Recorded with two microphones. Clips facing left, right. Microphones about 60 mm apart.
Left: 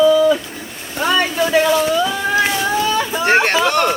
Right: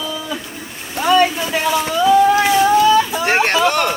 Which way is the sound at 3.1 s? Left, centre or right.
Centre.